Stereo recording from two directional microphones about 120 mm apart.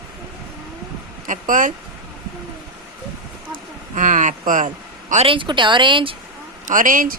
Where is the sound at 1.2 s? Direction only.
90° right.